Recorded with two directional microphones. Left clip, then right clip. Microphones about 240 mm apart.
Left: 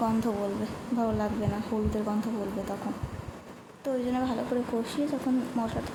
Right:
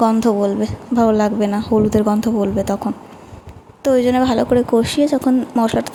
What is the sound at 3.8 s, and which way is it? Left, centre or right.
A woman's voice, right.